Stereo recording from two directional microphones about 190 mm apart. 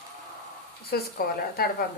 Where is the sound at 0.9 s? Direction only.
50° left (ahead or behind).